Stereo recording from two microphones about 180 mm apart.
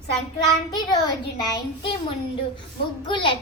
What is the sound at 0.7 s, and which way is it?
A child's voice, 25° left (ahead or behind).